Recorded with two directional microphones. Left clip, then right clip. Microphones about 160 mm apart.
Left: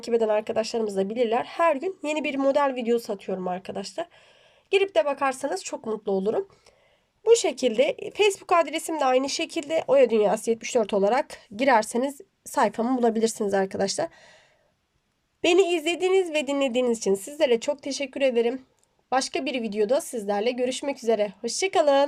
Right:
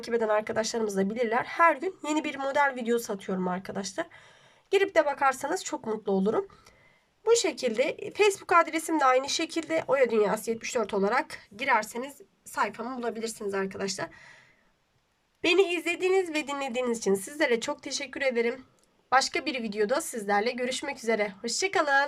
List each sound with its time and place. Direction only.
0.0 s speech: 15° left (ahead or behind)
7.3 s speech: 15° left (ahead or behind)
15.4 s speech: 25° left (ahead or behind)